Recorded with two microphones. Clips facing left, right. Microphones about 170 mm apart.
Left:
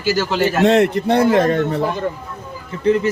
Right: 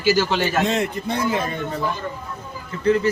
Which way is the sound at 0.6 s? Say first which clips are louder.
Left 8 dB; 65° left (ahead or behind).